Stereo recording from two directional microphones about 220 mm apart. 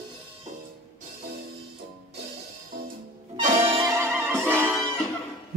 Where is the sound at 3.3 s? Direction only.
30° right (ahead or behind).